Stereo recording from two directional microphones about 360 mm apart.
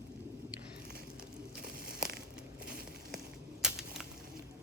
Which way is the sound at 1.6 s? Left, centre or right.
Right.